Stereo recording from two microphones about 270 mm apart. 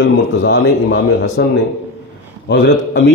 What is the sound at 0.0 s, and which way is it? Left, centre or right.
A man's voice, left.